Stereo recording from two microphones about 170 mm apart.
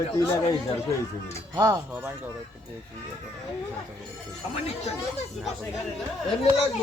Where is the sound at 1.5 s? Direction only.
20° right (ahead or behind).